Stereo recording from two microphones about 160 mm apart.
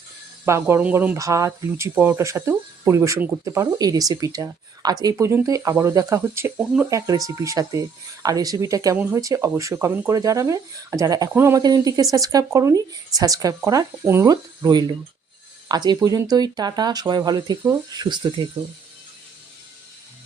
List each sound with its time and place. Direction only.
0.4 s speech: 15° right (ahead or behind)
9.0 s speech: 10° right (ahead or behind); by 18.4 s 25° right (ahead or behind)